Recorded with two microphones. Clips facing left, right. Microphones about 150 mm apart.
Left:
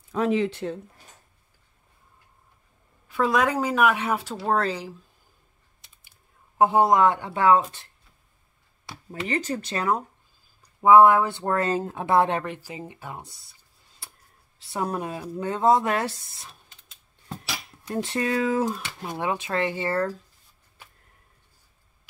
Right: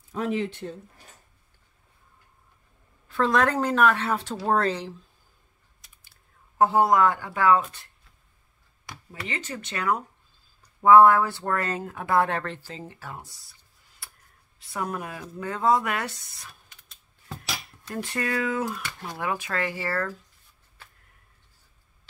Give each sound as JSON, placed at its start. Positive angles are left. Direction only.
{"t": 0.1, "sound": "speech", "side_deg": 90}
{"t": 3.1, "sound": "speech", "side_deg": 10}
{"t": 6.6, "sound": "speech", "side_deg": 20}
{"t": 9.3, "sound": "speech", "side_deg": 35}
{"t": 10.8, "sound": "speech", "side_deg": 15}
{"t": 14.6, "sound": "speech", "side_deg": 30}
{"t": 17.9, "sound": "speech", "side_deg": 25}